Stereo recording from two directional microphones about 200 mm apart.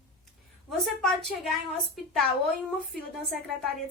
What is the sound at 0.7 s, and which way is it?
Speech, centre (ahead or behind).